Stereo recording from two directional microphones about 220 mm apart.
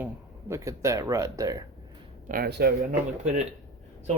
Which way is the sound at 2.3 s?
45° right (ahead or behind).